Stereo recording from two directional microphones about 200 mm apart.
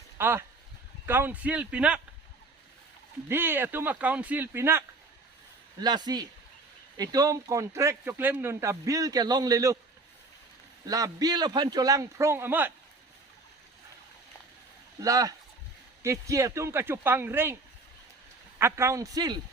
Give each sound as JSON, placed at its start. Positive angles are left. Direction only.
{"t": 0.2, "sound": "a man's voice", "side_deg": -10}
{"t": 3.2, "sound": "a man's voice", "side_deg": -10}
{"t": 5.8, "sound": "a man's voice", "side_deg": -20}
{"t": 10.8, "sound": "a man's voice", "side_deg": -20}
{"t": 15.0, "sound": "a man's voice", "side_deg": -15}
{"t": 18.6, "sound": "a man's voice", "side_deg": -15}